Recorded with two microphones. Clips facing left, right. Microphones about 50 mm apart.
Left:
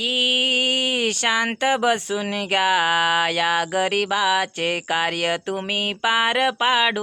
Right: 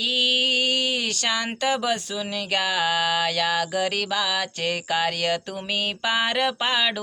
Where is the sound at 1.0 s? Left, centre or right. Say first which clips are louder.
Left 5 dB; left.